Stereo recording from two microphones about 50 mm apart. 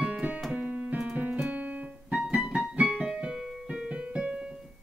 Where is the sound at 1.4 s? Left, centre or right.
Right.